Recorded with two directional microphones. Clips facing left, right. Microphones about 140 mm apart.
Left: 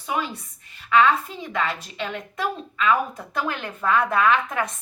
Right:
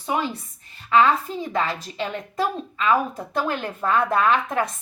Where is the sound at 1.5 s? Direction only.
30° right (ahead or behind).